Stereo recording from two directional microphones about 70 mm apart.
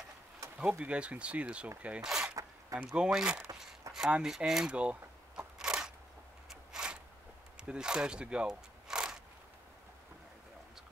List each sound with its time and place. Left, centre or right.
0.6 s speech: centre
2.0 s zipper: centre
2.8 s speech: centre
5.6 s biting: centre
6.5 s a sound: centre
7.5 s speech: centre